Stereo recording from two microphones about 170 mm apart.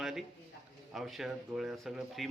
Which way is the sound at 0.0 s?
Centre (ahead or behind).